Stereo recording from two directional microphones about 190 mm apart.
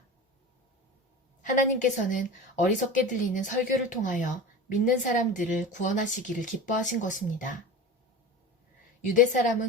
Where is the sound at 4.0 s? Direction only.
45° left (ahead or behind).